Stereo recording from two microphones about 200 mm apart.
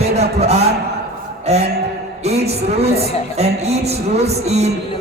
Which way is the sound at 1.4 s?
30° right (ahead or behind).